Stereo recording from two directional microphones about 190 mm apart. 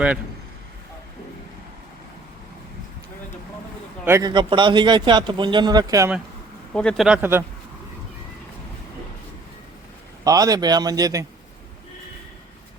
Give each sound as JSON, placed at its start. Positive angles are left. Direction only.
{"t": 4.0, "sound": "a man's voice", "side_deg": -15}
{"t": 6.7, "sound": "a man's voice", "side_deg": 5}
{"t": 10.2, "sound": "a man's voice", "side_deg": -20}